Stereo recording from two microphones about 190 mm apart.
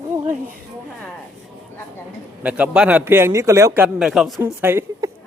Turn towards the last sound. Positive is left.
turn(degrees=-10)  # may be behind; listen again after turning